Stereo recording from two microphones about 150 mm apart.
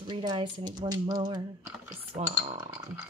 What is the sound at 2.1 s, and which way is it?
Speech, 40° right (ahead or behind).